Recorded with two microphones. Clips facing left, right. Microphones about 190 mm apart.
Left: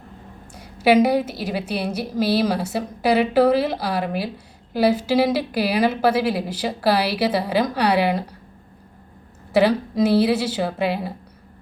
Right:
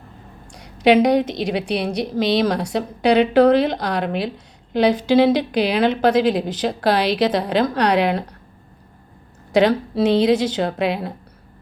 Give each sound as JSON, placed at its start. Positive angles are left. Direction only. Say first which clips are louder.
{"t": 0.5, "sound": "a woman's voice", "louder": "right 2 dB", "side_deg": 5}
{"t": 9.5, "sound": "a woman's voice", "louder": "right 1 dB", "side_deg": 5}
{"t": 10.8, "sound": "speech", "louder": "right 1 dB", "side_deg": -70}